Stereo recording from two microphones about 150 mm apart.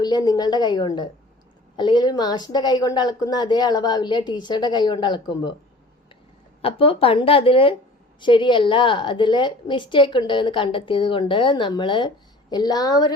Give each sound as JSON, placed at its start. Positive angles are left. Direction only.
{"t": 0.0, "sound": "a woman's voice", "side_deg": 25}
{"t": 6.6, "sound": "a woman's voice", "side_deg": 40}